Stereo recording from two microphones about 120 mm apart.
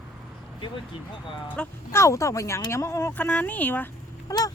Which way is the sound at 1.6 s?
10° left (ahead or behind).